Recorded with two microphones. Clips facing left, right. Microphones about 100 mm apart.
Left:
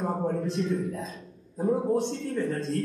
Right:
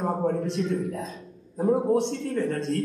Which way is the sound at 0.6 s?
Centre (ahead or behind).